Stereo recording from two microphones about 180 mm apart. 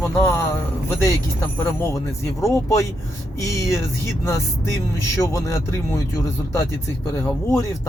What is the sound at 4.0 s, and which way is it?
Speech, 15° left (ahead or behind).